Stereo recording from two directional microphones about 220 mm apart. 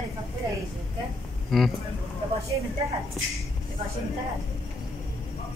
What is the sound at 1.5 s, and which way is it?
Speech, centre (ahead or behind).